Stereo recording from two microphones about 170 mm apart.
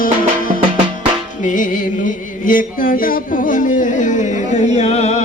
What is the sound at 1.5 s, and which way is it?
Music, 50° left (ahead or behind).